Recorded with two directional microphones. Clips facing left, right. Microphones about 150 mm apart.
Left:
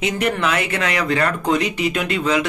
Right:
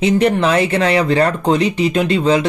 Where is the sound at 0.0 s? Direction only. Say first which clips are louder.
Right 7 dB; 30° right (ahead or behind).